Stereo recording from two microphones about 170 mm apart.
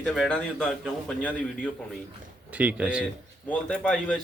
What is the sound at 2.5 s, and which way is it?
Speech, 10° right (ahead or behind).